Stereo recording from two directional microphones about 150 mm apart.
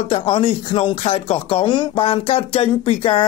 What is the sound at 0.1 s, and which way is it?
Speech, 40° left (ahead or behind).